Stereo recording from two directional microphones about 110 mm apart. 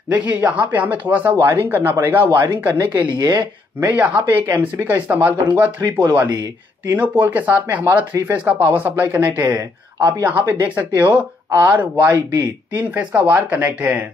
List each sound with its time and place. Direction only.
0.1 s speech: 15° right (ahead or behind)
3.2 s speech: 40° right (ahead or behind)
3.8 s speech: 15° right (ahead or behind)